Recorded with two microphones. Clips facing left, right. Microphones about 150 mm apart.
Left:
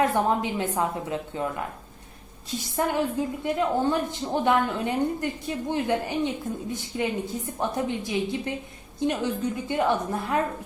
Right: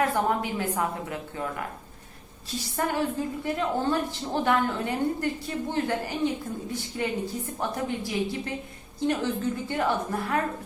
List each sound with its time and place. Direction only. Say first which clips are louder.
0.1 s a woman's voice: left 2 dB; 20° left (ahead or behind)
2.7 s a woman's voice: left 2 dB; 20° left (ahead or behind)